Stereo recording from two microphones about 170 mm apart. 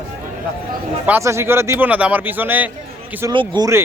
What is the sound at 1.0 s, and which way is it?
A man's voice, 15° right (ahead or behind).